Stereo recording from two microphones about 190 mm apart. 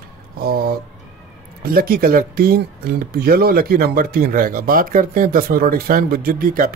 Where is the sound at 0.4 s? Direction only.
55° right (ahead or behind).